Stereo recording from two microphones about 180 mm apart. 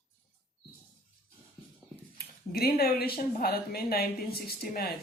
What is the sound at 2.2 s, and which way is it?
Speech, 60° left (ahead or behind).